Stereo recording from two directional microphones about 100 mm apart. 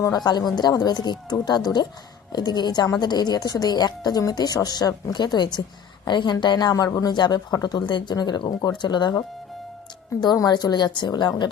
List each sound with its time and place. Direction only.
0.0 s a woman's voice: 40° left (ahead or behind)
10.2 s a woman's voice: 40° left (ahead or behind)